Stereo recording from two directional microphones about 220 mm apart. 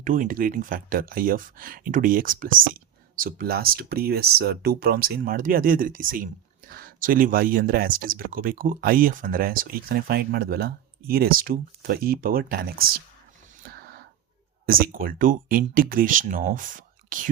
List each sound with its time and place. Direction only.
0.0 s speech: 35° right (ahead or behind)
13.6 s a sound: 40° right (ahead or behind)
14.7 s speech: 40° right (ahead or behind)